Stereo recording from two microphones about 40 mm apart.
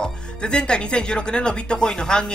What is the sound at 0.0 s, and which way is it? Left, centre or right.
Speech, left.